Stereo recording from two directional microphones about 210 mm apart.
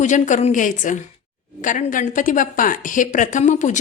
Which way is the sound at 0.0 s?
35° left (ahead or behind).